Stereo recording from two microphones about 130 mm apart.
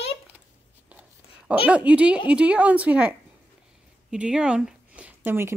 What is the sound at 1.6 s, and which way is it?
A woman's voice, 10° right (ahead or behind).